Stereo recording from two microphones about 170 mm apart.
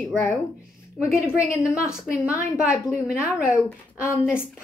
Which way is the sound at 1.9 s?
5° right (ahead or behind).